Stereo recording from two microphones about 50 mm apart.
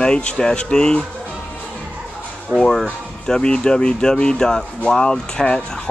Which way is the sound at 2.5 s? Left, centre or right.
Centre.